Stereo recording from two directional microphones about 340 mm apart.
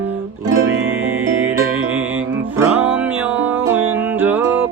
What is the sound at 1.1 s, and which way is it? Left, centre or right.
Music, centre.